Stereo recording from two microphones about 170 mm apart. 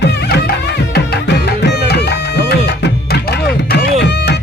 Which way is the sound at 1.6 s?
80° left.